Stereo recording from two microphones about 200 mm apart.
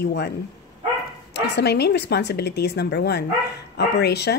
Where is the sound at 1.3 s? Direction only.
55° left (ahead or behind).